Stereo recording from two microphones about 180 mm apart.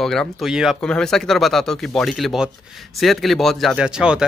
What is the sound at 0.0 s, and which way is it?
Speech, 5° left (ahead or behind).